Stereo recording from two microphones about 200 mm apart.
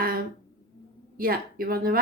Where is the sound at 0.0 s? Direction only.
45° right (ahead or behind).